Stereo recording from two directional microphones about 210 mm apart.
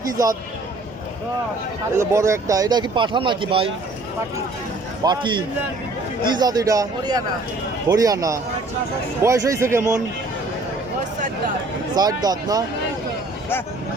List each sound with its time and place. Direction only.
2.0 s speech: 15° right (ahead or behind)
5.0 s speech: 20° right (ahead or behind)
11.9 s speech: 20° right (ahead or behind)